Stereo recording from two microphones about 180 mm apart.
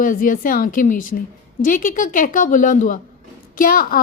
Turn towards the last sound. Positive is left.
turn(degrees=55)  # may be behind; listen again after turning